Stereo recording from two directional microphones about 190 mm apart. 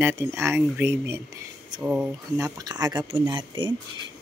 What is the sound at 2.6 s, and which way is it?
Speech, 20° right (ahead or behind).